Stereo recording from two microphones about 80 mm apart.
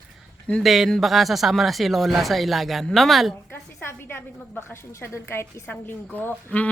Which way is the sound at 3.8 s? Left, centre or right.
Left.